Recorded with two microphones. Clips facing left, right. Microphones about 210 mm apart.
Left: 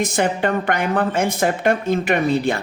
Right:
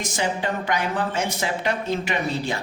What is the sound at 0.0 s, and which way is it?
Speech, 60° left (ahead or behind).